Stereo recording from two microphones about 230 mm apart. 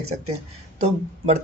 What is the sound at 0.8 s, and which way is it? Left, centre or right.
Speech, right.